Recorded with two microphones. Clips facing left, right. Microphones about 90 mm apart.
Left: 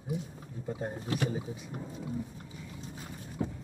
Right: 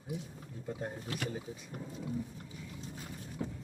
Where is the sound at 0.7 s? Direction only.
20° left (ahead or behind).